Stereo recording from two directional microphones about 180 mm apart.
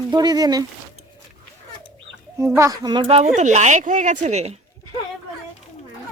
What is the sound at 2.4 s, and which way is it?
Speech, 15° right (ahead or behind).